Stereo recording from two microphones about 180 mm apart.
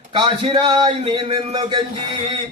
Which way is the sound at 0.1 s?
25° right (ahead or behind).